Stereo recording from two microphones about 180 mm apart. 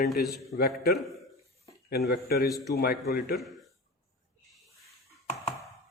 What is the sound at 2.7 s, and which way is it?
Speech, 60° left (ahead or behind).